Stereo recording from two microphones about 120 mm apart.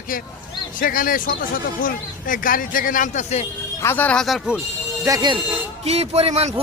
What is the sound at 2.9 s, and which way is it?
Speech, 90° left.